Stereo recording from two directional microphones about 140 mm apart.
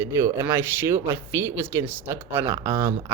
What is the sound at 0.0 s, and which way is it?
Speech, 20° right (ahead or behind).